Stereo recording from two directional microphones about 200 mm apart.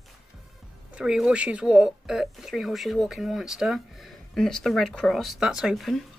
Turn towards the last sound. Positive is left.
turn(degrees=0)  # may be behind; listen again after turning